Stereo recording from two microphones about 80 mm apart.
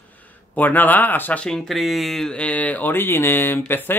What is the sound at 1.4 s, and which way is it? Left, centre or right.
Speech, centre.